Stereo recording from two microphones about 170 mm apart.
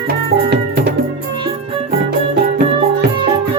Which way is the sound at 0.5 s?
80° right.